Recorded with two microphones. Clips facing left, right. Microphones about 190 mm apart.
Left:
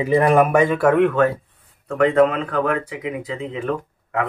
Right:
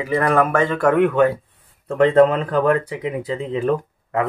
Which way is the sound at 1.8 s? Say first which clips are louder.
Right 2 dB; 30° right (ahead or behind).